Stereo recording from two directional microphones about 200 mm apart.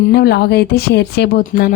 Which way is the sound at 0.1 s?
55° left (ahead or behind).